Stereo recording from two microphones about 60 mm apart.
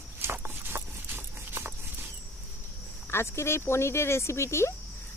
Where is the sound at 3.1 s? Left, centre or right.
Left.